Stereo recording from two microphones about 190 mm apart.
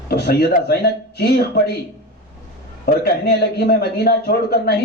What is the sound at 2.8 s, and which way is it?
A man's voice, 55° left (ahead or behind).